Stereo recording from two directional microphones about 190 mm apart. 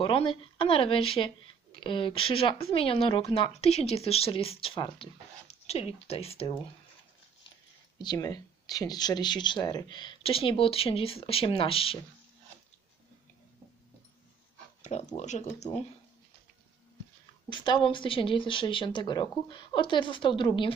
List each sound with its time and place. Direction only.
0.0 s speech: 30° left (ahead or behind)
8.0 s speech: 20° left (ahead or behind)
14.8 s a sound: 35° left (ahead or behind)
15.1 s speech: 35° left (ahead or behind)
17.5 s speech: 25° left (ahead or behind)